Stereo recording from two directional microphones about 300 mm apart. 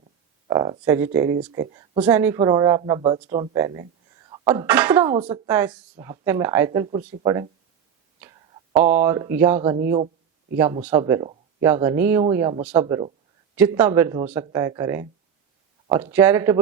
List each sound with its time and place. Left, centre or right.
0.4 s speech: centre
8.7 s speech: centre
10.8 s speech: centre
16.1 s speech: centre